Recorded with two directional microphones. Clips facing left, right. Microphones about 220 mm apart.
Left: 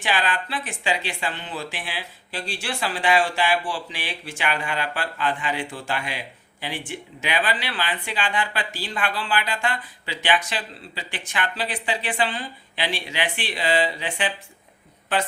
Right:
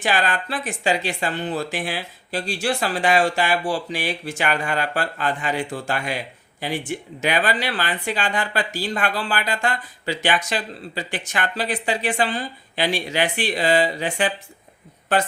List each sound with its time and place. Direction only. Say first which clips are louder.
0.0 s speech: right 3 dB; 45° right (ahead or behind)